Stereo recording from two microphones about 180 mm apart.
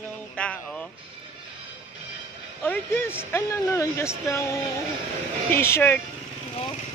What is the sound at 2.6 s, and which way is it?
Speech, 10° left (ahead or behind).